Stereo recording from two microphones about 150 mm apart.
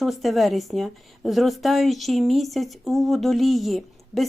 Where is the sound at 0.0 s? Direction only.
Centre (ahead or behind).